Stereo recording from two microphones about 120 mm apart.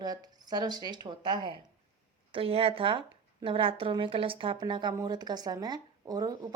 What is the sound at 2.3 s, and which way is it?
Speech, 50° right (ahead or behind).